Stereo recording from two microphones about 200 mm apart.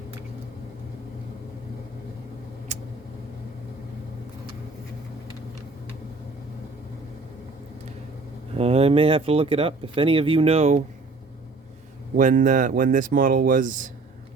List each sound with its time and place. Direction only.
8.5 s speech: 30° right (ahead or behind)
12.1 s speech: 40° right (ahead or behind)